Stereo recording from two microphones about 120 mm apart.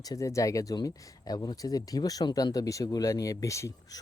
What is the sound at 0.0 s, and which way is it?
Speech, 30° left (ahead or behind).